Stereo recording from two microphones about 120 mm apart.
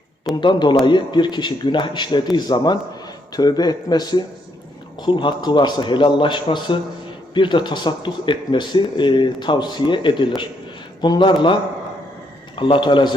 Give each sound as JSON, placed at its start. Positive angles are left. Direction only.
{"t": 0.3, "sound": "speech", "side_deg": 40}
{"t": 12.5, "sound": "speech", "side_deg": 45}